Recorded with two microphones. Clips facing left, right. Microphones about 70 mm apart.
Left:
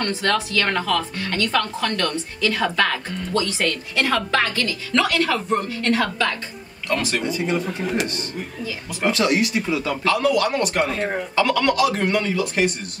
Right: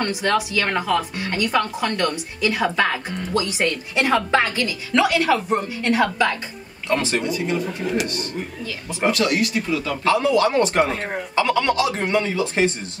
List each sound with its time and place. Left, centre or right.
0.0 s a woman's voice: centre
7.2 s speech: left
9.1 s speech: left
10.0 s speech: right